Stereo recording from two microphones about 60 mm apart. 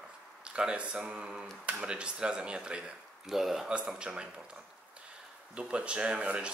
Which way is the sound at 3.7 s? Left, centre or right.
Centre.